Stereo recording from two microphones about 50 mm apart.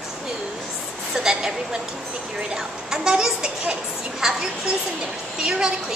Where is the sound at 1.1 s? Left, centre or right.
Centre.